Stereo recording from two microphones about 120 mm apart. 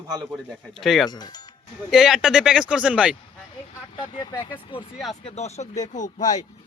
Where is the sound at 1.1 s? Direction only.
35° left (ahead or behind).